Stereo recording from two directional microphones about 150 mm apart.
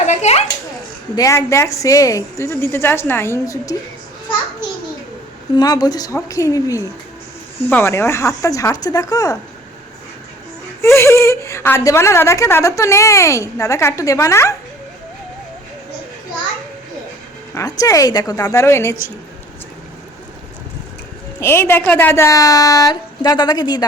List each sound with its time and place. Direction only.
0.0 s a sound: 50° left (ahead or behind)
1.1 s a woman's voice: 20° left (ahead or behind)
5.5 s a woman's voice: 25° left (ahead or behind)
10.8 s a woman's voice: 15° left (ahead or behind)
17.5 s a woman's voice: 25° left (ahead or behind)
21.4 s a woman's voice: 15° left (ahead or behind)